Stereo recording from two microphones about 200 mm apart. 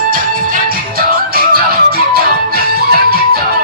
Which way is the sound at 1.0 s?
50° right (ahead or behind).